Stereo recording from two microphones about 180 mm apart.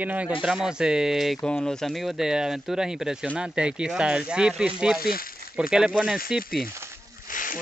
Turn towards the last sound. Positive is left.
turn(degrees=50)  # may be behind; listen again after turning